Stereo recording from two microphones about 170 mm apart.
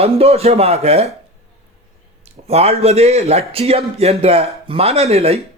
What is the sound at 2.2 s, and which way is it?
A man's voice, 40° right (ahead or behind).